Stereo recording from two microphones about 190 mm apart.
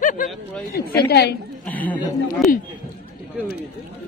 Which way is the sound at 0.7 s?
55° left (ahead or behind).